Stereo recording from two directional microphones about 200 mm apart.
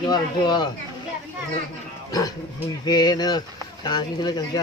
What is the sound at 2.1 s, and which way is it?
Speech, 15° left (ahead or behind).